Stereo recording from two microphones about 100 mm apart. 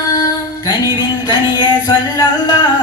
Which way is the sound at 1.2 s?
45° left (ahead or behind).